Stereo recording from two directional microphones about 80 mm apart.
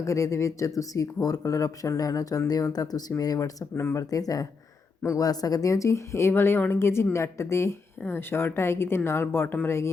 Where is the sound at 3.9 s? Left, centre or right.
Left.